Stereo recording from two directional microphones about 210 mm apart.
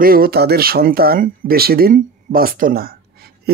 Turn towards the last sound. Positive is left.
turn(degrees=-50)  # may be behind; listen again after turning